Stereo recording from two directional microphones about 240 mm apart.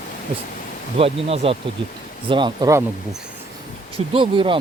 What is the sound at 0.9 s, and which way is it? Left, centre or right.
Speech, right.